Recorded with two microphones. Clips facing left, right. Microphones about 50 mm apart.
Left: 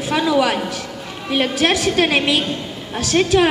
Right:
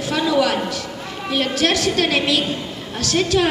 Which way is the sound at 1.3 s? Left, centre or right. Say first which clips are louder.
Left 2 dB; left.